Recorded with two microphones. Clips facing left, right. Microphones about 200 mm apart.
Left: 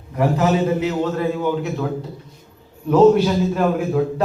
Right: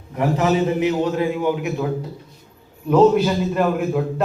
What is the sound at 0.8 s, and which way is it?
Speech, 15° right (ahead or behind).